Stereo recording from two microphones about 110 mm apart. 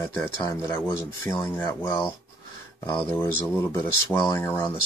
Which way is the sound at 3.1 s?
20° left (ahead or behind).